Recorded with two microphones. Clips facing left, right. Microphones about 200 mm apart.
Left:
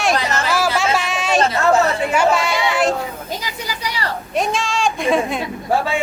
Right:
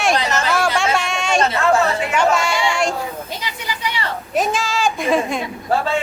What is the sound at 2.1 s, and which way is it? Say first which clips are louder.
Speech: even; 5° left (ahead or behind).